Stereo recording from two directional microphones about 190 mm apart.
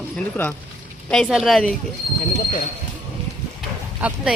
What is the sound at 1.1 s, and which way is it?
Speech, centre (ahead or behind).